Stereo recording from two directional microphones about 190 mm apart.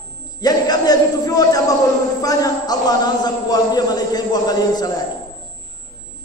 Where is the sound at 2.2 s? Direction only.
20° left (ahead or behind).